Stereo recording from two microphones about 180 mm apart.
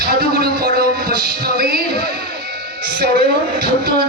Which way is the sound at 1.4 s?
55° right (ahead or behind).